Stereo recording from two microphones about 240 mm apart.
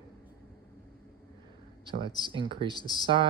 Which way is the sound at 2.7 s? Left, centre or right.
Centre.